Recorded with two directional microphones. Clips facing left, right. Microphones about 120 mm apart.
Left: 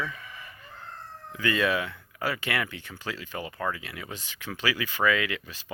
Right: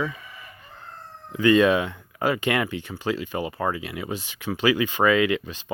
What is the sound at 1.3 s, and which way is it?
Speech, 20° right (ahead or behind).